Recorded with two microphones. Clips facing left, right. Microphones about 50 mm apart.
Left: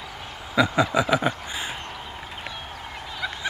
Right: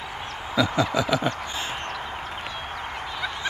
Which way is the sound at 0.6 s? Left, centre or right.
Centre.